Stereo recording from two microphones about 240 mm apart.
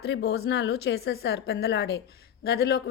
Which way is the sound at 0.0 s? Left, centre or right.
Left.